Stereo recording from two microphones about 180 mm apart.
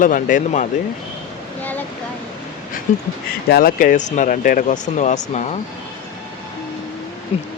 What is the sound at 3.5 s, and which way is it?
Speech, 55° left (ahead or behind).